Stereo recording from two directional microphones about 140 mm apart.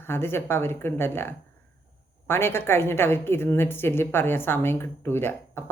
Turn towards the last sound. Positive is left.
turn(degrees=15)  # may be behind; listen again after turning